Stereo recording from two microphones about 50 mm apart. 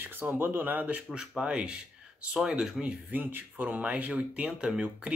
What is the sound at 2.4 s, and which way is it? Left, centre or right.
Speech, centre.